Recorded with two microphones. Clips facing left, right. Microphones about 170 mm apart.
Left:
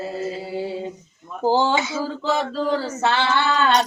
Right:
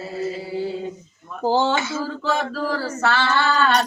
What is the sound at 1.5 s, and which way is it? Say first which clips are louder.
Female singing: even; 15° left (ahead or behind).